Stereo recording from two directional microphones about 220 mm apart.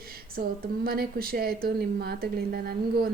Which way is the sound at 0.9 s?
45° right (ahead or behind).